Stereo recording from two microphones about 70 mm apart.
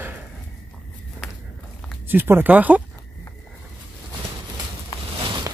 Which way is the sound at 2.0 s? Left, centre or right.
Right.